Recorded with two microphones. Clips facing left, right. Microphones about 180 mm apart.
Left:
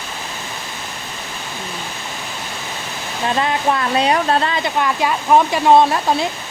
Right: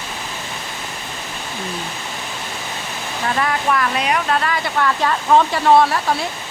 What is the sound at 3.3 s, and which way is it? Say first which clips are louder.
Speech: left 2 dB; 20° left (ahead or behind).